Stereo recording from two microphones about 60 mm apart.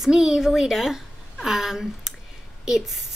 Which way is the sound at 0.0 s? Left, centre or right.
Centre.